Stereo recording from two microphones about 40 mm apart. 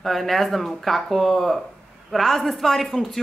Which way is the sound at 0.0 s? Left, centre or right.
Centre.